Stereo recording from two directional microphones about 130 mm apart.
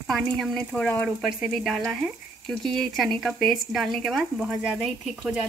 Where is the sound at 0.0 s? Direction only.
Centre (ahead or behind).